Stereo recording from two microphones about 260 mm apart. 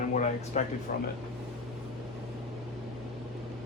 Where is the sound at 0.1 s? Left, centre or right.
Left.